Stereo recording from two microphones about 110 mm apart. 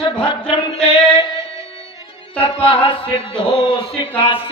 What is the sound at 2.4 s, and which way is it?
Music, 50° left (ahead or behind).